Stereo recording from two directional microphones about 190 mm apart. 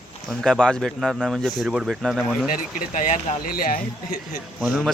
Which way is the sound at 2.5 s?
40° left (ahead or behind).